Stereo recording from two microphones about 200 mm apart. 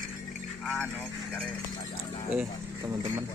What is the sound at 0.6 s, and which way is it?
Speech, 5° left (ahead or behind).